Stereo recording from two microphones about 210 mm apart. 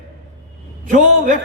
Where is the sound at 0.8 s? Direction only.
40° right (ahead or behind).